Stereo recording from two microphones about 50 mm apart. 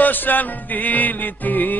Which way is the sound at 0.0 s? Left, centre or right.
Left.